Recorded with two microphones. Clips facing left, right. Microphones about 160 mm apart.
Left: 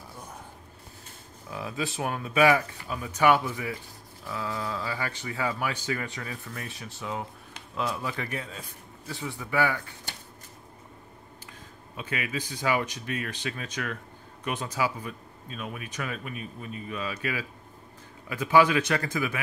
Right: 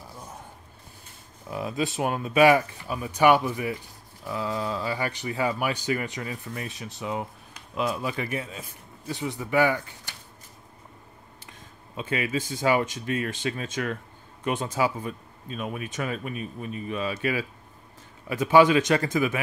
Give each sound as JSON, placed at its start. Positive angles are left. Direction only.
{"t": 1.5, "sound": "speech", "side_deg": -20}
{"t": 9.1, "sound": "speech", "side_deg": -20}
{"t": 12.0, "sound": "speech", "side_deg": -30}